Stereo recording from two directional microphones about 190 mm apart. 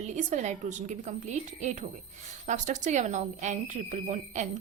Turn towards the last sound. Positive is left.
turn(degrees=-40)  # may be behind; listen again after turning